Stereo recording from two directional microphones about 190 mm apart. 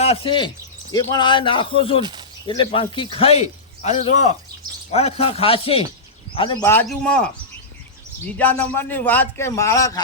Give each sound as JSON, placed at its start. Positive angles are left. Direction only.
{"t": 0.0, "sound": "a man's voice", "side_deg": 30}
{"t": 6.6, "sound": "a man's voice", "side_deg": 15}
{"t": 8.4, "sound": "a man's voice", "side_deg": 10}